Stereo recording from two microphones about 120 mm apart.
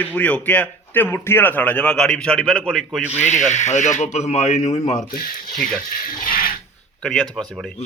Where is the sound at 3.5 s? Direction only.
80° left.